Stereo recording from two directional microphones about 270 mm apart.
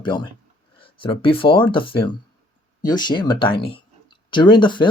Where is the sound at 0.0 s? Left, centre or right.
Centre.